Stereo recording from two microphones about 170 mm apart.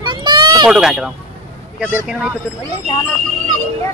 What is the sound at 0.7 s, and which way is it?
Speech, 5° right (ahead or behind).